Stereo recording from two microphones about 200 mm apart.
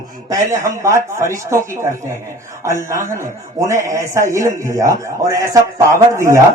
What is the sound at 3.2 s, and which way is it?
A man's voice, 15° right (ahead or behind).